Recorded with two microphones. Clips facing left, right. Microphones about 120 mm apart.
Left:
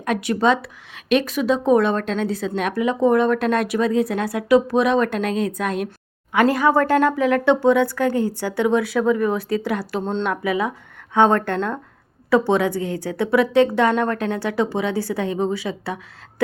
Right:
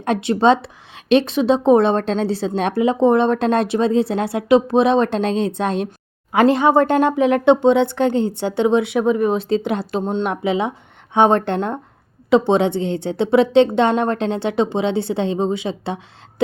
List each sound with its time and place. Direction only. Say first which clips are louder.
0.0 s speech: right 3 dB; 25° right (ahead or behind)